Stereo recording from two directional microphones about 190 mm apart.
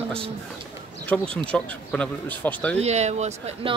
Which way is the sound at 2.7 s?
35° right (ahead or behind).